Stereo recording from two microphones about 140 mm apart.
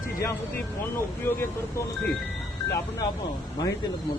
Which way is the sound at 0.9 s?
15° left (ahead or behind).